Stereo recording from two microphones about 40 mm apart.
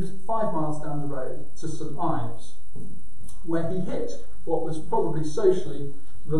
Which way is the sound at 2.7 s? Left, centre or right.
Right.